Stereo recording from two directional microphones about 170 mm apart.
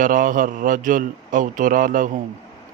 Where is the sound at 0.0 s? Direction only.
50° right (ahead or behind).